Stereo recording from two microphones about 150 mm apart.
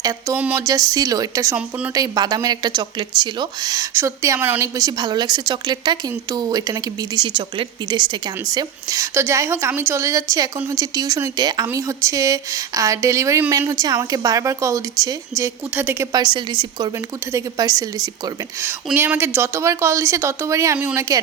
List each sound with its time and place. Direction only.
0.5 s speech: 25° right (ahead or behind)
4.8 s speech: 25° right (ahead or behind)
16.1 s a woman's voice: 30° right (ahead or behind)